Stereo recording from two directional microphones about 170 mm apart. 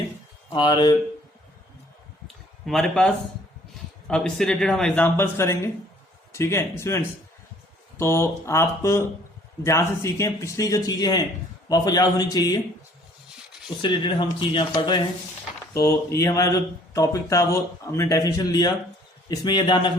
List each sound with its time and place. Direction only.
0.5 s a man's voice: 25° left (ahead or behind)
2.2 s a sound: centre (ahead or behind)
4.1 s a man's voice: 5° left (ahead or behind); by 12.5 s 25° left (ahead or behind)
13.8 s a man's voice: 25° left (ahead or behind)